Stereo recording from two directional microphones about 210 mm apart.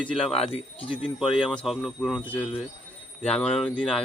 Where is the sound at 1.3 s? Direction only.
Centre (ahead or behind).